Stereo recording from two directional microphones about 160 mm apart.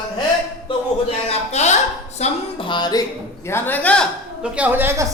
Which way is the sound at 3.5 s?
15° left (ahead or behind).